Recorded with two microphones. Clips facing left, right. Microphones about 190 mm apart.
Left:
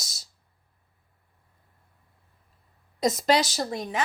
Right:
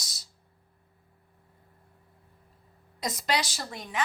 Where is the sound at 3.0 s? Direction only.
45° left (ahead or behind).